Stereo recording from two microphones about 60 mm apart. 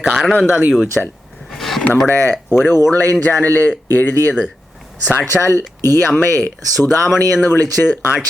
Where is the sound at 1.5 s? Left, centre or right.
Centre.